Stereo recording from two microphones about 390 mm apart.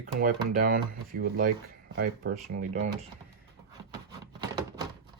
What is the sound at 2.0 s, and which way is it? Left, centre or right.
Speech, right.